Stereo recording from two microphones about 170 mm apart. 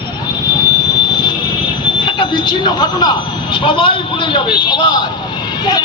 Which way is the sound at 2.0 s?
30° left (ahead or behind).